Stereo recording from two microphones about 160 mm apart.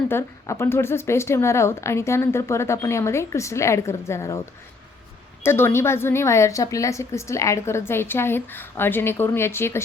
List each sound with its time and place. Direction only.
0.1 s a woman's voice: 15° left (ahead or behind)
5.4 s a woman's voice: 15° left (ahead or behind)